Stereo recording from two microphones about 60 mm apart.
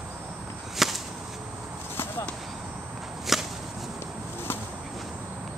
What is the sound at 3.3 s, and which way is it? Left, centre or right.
Whip, centre.